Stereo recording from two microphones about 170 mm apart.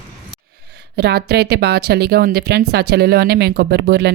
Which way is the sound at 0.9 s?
70° right (ahead or behind).